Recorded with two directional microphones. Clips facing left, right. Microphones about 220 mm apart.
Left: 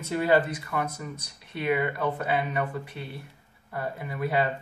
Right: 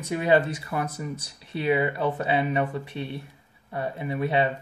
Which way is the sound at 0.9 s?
30° right (ahead or behind).